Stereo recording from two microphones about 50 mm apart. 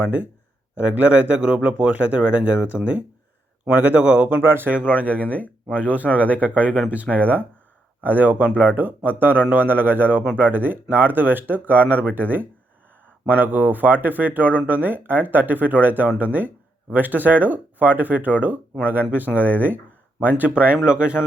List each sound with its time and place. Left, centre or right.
0.0 s speech: right
4.4 s speech: right
5.8 s speech: right
20.5 s speech: right